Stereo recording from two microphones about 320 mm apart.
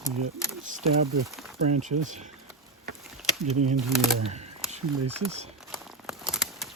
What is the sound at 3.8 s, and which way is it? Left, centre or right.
Speech, centre.